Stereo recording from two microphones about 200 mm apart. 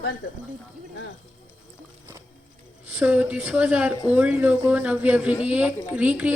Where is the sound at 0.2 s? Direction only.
50° left (ahead or behind).